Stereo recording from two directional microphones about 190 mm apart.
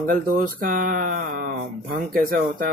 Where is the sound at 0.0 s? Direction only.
45° right (ahead or behind).